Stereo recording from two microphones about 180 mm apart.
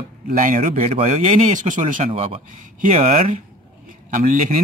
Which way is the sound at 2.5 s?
45° right (ahead or behind).